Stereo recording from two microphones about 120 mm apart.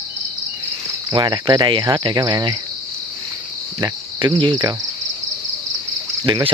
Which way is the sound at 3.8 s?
35° right (ahead or behind).